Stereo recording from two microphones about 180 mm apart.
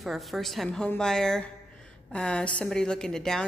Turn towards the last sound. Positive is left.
turn(degrees=5)  # may be behind; listen again after turning